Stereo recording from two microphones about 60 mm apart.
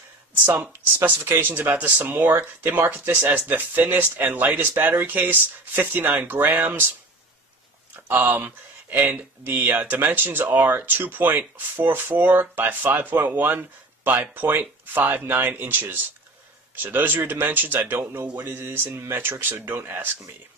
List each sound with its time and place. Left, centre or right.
0.5 s speech: right
7.9 s speech: right